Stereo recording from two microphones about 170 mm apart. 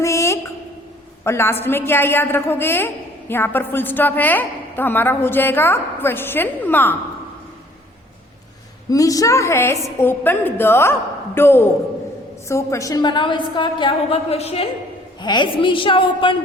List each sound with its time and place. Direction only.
0.0 s a sound: 15° left (ahead or behind)
1.2 s a woman's voice: 15° left (ahead or behind)
8.9 s a woman's voice: 20° left (ahead or behind); by 14.7 s 35° left (ahead or behind)
15.2 s a woman's voice: 25° left (ahead or behind)